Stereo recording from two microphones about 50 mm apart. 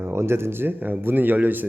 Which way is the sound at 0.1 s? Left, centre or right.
Right.